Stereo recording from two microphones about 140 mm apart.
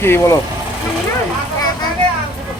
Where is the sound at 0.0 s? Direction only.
15° left (ahead or behind).